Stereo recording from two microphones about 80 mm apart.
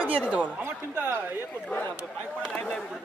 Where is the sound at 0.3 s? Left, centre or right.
Centre.